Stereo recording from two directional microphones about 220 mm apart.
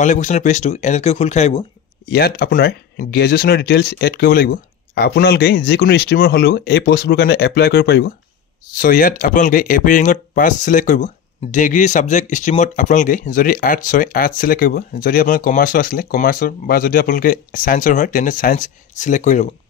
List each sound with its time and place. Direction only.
0.0 s speech: 35° left (ahead or behind)
2.0 s speech: 45° left (ahead or behind)